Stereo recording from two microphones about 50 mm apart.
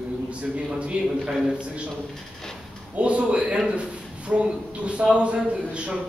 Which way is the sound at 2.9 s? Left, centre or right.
Right.